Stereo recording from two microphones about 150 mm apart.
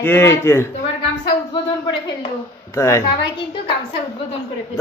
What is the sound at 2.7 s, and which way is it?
Speech, 20° left (ahead or behind).